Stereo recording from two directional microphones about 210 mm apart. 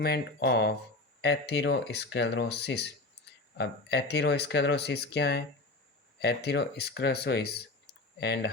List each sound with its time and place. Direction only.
0.0 s speech: 50° left (ahead or behind)
3.2 s a sound: 55° left (ahead or behind)
3.6 s speech: 50° left (ahead or behind)